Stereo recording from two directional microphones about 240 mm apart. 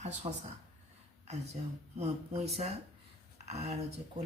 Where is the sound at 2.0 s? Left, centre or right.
Right.